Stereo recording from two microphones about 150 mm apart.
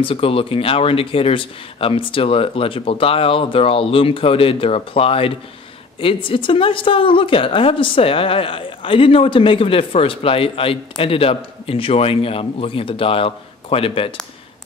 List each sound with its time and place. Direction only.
0.0 s a woman's voice: 40° left (ahead or behind)